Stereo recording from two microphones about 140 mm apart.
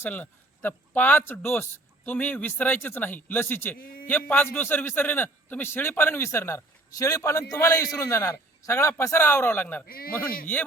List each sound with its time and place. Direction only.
0.0 s speech: 15° left (ahead or behind)
9.8 s a man's voice: 90° left
10.1 s speech: 10° left (ahead or behind)